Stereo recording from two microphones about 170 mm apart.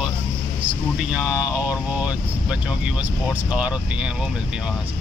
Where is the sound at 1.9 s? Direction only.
5° right (ahead or behind).